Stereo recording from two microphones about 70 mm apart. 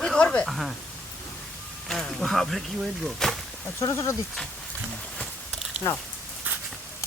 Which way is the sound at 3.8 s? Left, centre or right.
Left.